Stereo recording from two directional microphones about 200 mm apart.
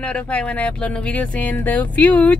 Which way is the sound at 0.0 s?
5° left (ahead or behind).